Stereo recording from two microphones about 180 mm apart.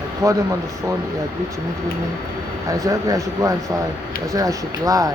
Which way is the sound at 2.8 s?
20° right (ahead or behind).